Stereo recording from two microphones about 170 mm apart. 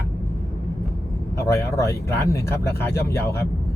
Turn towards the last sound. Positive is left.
turn(degrees=15)  # may be behind; listen again after turning